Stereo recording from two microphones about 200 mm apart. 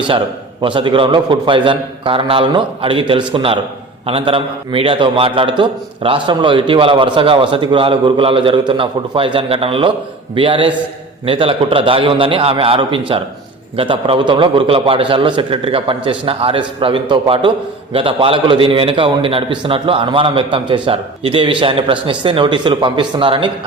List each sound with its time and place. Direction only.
0.6 s a man's voice: 25° right (ahead or behind)